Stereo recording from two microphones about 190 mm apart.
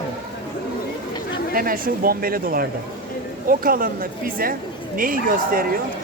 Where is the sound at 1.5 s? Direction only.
50° right (ahead or behind).